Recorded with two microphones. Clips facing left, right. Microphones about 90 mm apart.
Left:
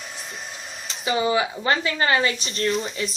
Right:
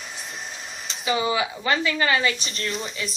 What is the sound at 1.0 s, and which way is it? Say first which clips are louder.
A woman's voice: left 2 dB; 35° left (ahead or behind).